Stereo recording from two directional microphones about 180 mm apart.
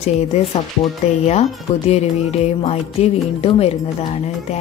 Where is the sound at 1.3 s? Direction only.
35° left (ahead or behind).